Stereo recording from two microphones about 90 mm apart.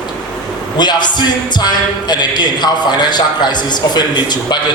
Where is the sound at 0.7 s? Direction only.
55° left (ahead or behind).